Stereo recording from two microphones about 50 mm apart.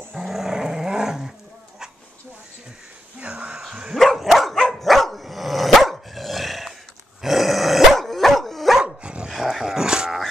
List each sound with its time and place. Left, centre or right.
0.2 s dog: centre
3.3 s a sound: centre
3.9 s dog: centre
8.7 s dog: right
9.3 s dog: centre